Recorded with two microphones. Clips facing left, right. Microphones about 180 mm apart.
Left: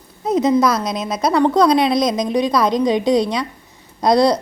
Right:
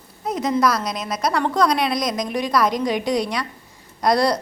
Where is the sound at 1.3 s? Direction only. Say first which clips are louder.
Left 7 dB; 25° left (ahead or behind).